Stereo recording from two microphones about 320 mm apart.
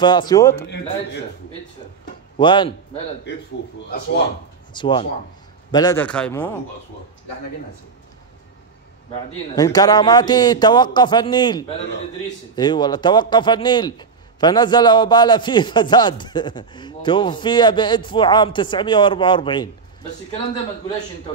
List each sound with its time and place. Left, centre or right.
0.0 s a man's voice: centre
2.3 s a man's voice: centre
3.3 s speech: left
4.7 s a man's voice: centre
9.6 s a man's voice: centre